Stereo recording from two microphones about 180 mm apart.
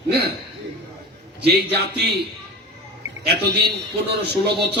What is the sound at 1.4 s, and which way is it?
Speech, 65° right (ahead or behind).